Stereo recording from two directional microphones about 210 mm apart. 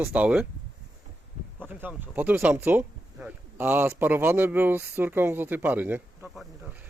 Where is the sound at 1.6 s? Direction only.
10° right (ahead or behind).